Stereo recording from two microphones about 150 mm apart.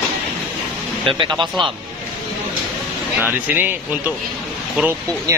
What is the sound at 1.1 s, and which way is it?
Speech, 30° right (ahead or behind).